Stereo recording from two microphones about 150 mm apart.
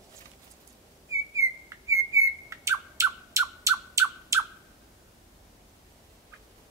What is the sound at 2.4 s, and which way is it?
Bird, 20° right (ahead or behind).